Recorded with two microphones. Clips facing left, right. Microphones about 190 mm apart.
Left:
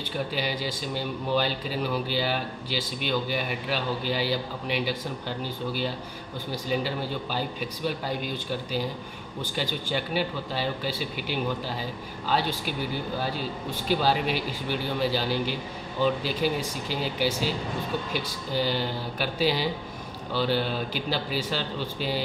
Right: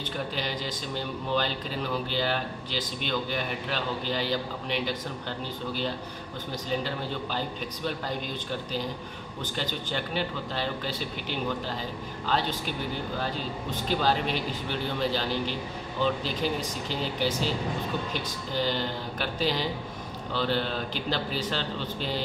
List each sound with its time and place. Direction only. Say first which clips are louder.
0.4 s a man's voice: left 3 dB; 5° left (ahead or behind)
9.6 s a man's voice: left 3 dB; 10° left (ahead or behind)